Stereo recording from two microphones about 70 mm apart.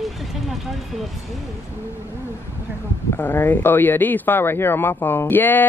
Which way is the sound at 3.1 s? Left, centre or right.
Left.